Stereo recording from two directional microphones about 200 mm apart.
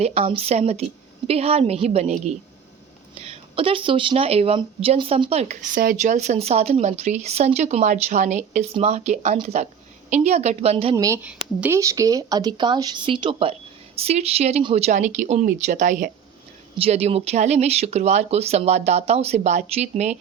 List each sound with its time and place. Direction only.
0.0 s speech: 30° right (ahead or behind)
3.2 s speech: 30° right (ahead or behind)
5.7 s speech: 45° right (ahead or behind); by 10.9 s 30° right (ahead or behind)
10.9 s speech: 15° right (ahead or behind); by 20.1 s 35° right (ahead or behind)